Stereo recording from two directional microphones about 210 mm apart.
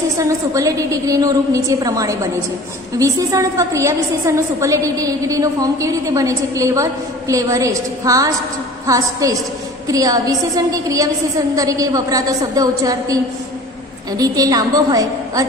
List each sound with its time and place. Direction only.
0.2 s a woman's voice: 15° right (ahead or behind)